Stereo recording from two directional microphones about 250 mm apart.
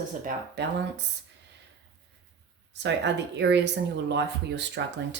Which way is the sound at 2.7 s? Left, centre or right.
Right.